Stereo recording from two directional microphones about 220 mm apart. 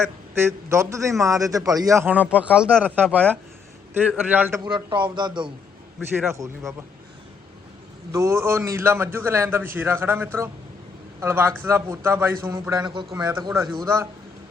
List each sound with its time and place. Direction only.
0.7 s a man's voice: 15° right (ahead or behind)
4.6 s a man's voice: 20° right (ahead or behind)
8.1 s a man's voice: 15° right (ahead or behind)